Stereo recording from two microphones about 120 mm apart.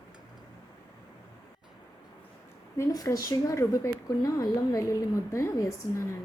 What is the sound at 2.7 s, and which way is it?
A woman's voice, 25° left (ahead or behind).